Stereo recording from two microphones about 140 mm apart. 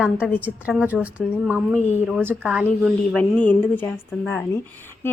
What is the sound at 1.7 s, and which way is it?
Speech, 55° left (ahead or behind).